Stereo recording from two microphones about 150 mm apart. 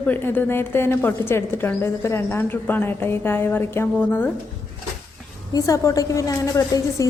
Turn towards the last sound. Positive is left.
turn(degrees=25)  # may be behind; listen again after turning